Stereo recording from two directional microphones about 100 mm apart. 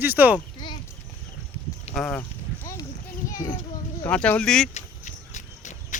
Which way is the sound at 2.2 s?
30° left (ahead or behind).